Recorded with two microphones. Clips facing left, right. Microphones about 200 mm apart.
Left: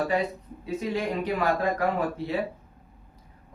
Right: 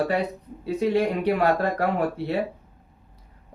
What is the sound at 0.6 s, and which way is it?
Speech, 65° right (ahead or behind).